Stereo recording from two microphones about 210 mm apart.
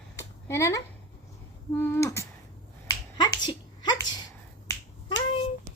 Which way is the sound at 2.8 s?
15° left (ahead or behind).